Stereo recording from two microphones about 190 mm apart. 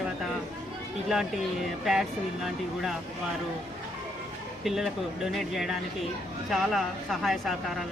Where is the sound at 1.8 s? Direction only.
Centre (ahead or behind).